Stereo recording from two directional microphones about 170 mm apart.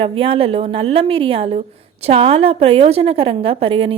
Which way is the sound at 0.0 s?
30° right (ahead or behind).